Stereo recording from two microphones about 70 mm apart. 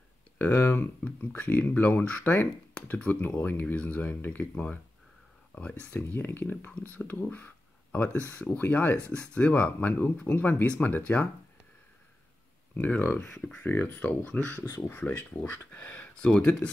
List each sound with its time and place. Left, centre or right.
0.7 s speech: left
12.7 s speech: left